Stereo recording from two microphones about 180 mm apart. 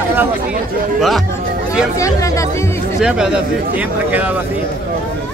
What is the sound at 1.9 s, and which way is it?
Speech, 15° left (ahead or behind).